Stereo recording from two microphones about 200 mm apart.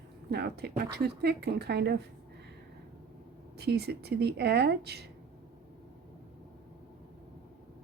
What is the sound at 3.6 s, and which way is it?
A woman's voice, 55° right (ahead or behind).